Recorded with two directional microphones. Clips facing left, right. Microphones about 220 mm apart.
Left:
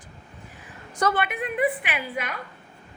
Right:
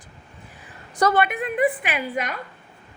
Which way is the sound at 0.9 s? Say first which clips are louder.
Right 4 dB; 40° right (ahead or behind).